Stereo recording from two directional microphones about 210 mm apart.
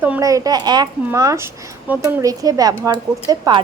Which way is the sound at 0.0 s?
10° right (ahead or behind).